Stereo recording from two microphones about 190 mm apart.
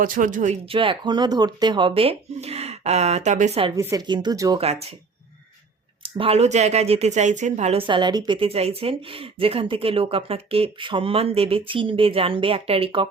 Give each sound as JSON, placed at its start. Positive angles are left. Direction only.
{"t": 0.0, "sound": "speech", "side_deg": -45}
{"t": 3.8, "sound": "speech", "side_deg": -15}
{"t": 4.6, "sound": "speech", "side_deg": -35}
{"t": 6.0, "sound": "speech", "side_deg": -30}